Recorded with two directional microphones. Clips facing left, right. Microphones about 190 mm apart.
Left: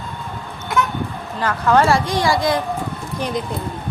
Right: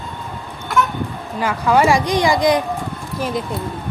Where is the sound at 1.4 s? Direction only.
10° right (ahead or behind).